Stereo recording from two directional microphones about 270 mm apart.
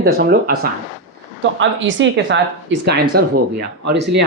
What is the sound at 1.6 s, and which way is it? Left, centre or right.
Speech, right.